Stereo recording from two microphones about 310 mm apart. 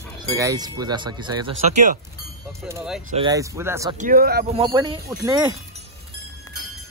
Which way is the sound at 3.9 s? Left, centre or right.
Right.